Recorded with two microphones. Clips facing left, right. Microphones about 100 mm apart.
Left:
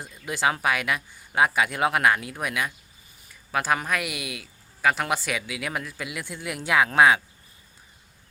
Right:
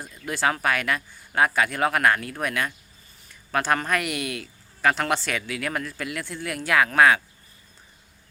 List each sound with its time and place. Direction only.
0.0 s speech: 15° left (ahead or behind)